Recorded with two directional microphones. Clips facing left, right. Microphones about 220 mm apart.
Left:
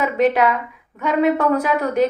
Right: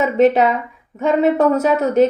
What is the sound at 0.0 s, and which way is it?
A woman's voice, 25° right (ahead or behind).